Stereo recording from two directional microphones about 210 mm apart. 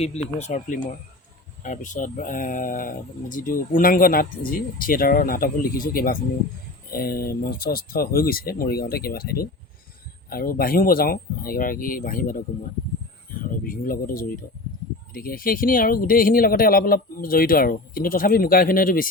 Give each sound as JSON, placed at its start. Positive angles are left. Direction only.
{"t": 0.0, "sound": "speech", "side_deg": 30}
{"t": 13.7, "sound": "speech", "side_deg": 45}